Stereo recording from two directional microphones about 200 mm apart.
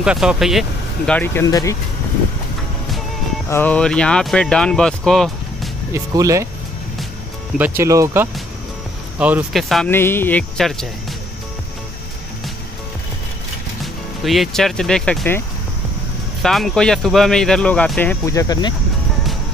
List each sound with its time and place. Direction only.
0.0 s speech: 5° right (ahead or behind); by 1.8 s 15° left (ahead or behind)
3.4 s speech: 10° left (ahead or behind)
5.9 s speech: 15° right (ahead or behind)
7.5 s speech: 10° right (ahead or behind); by 10.9 s 5° left (ahead or behind)
14.2 s speech: centre (ahead or behind)
16.4 s speech: centre (ahead or behind); by 18.8 s 20° left (ahead or behind)